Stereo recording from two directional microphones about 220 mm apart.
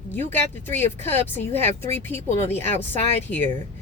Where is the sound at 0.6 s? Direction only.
10° left (ahead or behind).